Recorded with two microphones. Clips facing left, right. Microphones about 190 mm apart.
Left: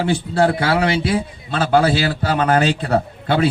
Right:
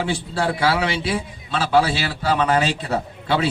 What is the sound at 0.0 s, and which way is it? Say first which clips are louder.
A man's voice: left 6 dB; 55° left (ahead or behind).